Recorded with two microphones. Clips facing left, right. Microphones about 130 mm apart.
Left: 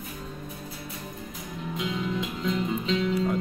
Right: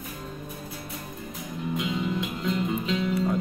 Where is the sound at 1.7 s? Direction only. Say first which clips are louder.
Right 1 dB; 5° right (ahead or behind).